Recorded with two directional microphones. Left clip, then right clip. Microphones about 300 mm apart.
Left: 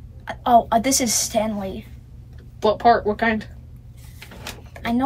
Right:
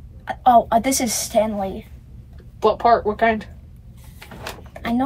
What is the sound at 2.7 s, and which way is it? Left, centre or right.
Speech, centre.